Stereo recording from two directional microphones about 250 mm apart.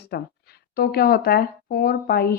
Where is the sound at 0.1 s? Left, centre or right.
Left.